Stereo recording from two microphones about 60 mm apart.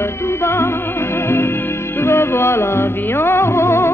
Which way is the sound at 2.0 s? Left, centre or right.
Left.